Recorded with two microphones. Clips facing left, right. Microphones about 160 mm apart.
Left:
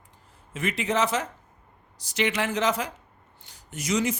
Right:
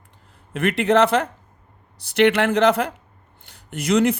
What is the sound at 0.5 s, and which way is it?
Speech, 60° right (ahead or behind).